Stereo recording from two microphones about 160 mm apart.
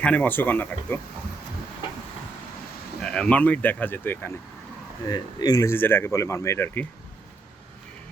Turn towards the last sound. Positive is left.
turn(degrees=15)  # may be behind; listen again after turning